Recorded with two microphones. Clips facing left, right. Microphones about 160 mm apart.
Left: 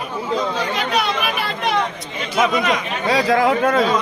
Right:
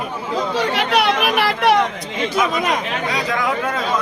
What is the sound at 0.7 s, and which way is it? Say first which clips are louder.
Chatter: right 3 dB; 75° right (ahead or behind).